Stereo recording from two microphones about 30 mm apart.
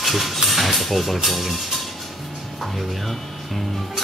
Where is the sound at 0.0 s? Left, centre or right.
Centre.